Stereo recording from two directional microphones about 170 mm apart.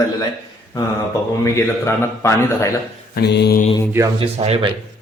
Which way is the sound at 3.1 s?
80° left.